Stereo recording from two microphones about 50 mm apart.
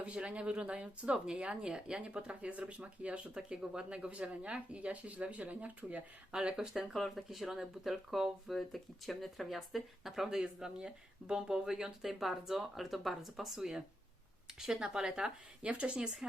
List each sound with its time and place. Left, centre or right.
0.0 s speech: right
6.3 s speech: centre
6.9 s speech: centre
10.2 s speech: centre